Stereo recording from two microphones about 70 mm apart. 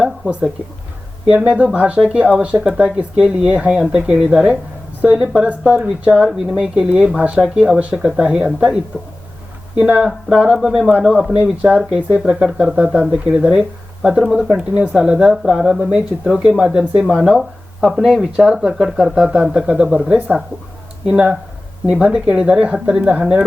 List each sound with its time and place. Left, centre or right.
1.4 s speech: centre
5.0 s speech: centre
10.1 s speech: centre